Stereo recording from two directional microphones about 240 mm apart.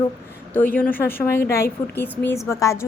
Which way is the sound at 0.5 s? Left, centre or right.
Centre.